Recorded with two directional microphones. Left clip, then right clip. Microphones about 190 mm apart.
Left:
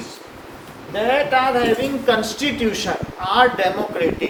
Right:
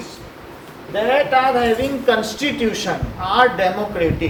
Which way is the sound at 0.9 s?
25° left (ahead or behind).